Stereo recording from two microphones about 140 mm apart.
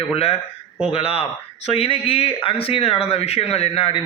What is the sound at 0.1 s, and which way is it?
Speech, 45° left (ahead or behind).